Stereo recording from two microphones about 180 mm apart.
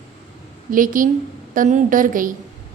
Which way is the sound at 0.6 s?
50° right (ahead or behind).